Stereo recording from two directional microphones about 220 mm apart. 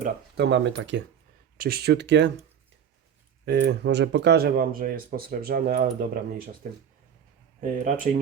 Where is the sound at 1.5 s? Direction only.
45° right (ahead or behind).